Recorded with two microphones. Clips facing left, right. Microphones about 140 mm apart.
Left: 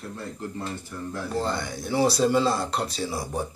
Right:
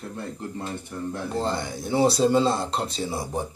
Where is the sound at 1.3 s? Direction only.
25° right (ahead or behind).